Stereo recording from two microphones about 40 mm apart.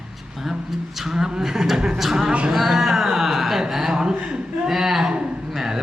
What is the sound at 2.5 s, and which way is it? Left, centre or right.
Music, centre.